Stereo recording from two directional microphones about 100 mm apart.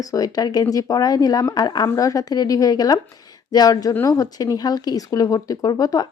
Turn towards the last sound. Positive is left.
turn(degrees=40)  # may be behind; listen again after turning